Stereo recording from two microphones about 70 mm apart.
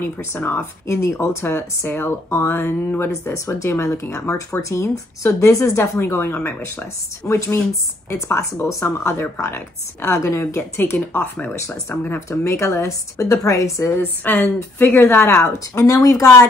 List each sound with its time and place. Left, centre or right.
0.0 s speech: left
10.8 s speech: left
11.4 s speech: left
11.9 s speech: left
12.3 s speech: left
14.2 s speech: left